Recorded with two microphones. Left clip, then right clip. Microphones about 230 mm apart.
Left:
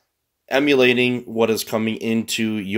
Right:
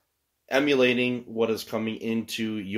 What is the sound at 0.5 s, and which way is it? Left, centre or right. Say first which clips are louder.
Speech: left 6 dB; left.